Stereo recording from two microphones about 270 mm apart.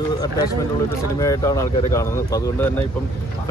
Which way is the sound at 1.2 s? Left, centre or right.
Centre.